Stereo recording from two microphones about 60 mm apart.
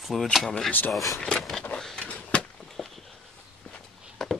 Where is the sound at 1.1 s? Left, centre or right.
Centre.